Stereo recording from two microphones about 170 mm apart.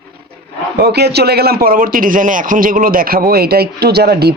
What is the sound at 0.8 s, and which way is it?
A man's voice, 75° right (ahead or behind).